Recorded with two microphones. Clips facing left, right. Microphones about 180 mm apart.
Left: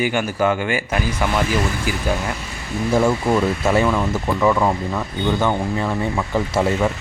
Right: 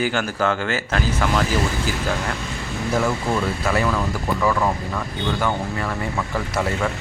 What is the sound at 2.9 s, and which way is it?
Speech, 25° left (ahead or behind).